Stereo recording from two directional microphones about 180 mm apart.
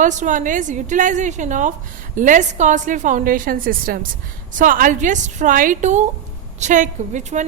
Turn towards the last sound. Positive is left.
turn(degrees=-40)  # may be behind; listen again after turning